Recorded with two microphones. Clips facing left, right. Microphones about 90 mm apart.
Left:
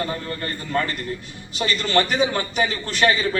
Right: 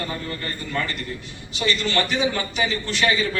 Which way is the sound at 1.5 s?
40° left (ahead or behind).